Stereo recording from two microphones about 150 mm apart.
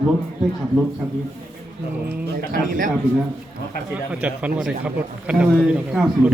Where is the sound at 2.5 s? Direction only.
65° right (ahead or behind).